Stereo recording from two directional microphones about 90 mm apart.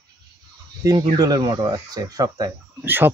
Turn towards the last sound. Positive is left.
turn(degrees=-25)  # may be behind; listen again after turning